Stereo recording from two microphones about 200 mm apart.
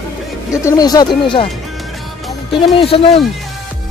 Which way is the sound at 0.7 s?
20° left (ahead or behind).